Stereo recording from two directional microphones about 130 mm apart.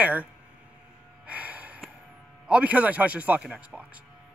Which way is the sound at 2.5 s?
10° right (ahead or behind).